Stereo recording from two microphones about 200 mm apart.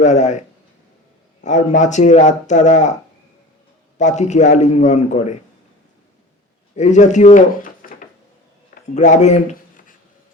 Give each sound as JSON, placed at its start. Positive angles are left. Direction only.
{"t": 0.0, "sound": "speech", "side_deg": 35}
{"t": 1.5, "sound": "speech", "side_deg": 35}
{"t": 3.9, "sound": "speech", "side_deg": 35}
{"t": 6.7, "sound": "speech", "side_deg": 35}
{"t": 8.7, "sound": "a sound", "side_deg": 35}